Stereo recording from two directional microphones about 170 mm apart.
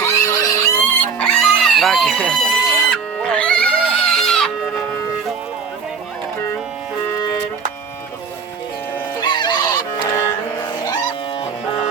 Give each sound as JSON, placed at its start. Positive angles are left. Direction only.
{"t": 0.0, "sound": "music", "side_deg": 15}
{"t": 1.2, "sound": "a sound", "side_deg": 5}
{"t": 9.2, "sound": "chicken", "side_deg": 25}